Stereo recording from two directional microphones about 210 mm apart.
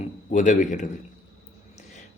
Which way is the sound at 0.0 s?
35° left (ahead or behind).